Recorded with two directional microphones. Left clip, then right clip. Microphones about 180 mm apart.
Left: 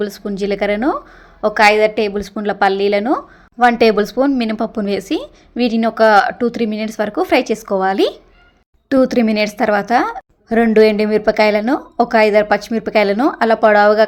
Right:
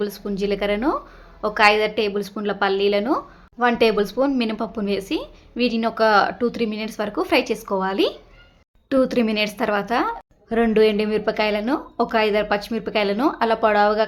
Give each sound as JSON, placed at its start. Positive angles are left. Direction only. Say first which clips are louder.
{"t": 0.0, "sound": "a woman's voice", "louder": "left 4 dB", "side_deg": 25}